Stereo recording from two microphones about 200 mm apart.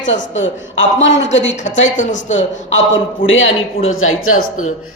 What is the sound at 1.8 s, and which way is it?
Speech, 40° left (ahead or behind).